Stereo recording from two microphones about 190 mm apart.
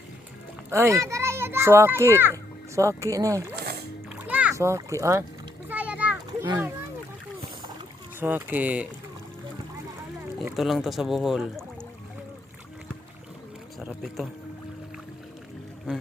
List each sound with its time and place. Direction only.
0.7 s a child's voice: 15° right (ahead or behind)
3.5 s music: 55° right (ahead or behind)
4.1 s splash: 10° right (ahead or behind)
5.6 s a sound: 10° right (ahead or behind)
8.2 s speech: 10° right (ahead or behind)
10.6 s speech: centre (ahead or behind)
13.7 s a sound: centre (ahead or behind)